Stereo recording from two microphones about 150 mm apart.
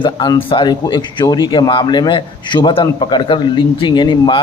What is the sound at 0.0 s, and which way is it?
A man's voice, 30° left (ahead or behind).